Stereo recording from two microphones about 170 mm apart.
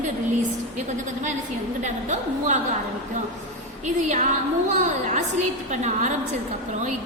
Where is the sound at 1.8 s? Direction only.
45° right (ahead or behind).